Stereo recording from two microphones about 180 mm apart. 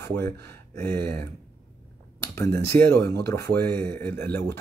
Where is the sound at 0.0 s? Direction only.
15° left (ahead or behind).